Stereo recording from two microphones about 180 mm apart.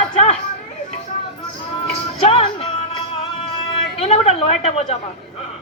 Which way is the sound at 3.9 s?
35° left (ahead or behind).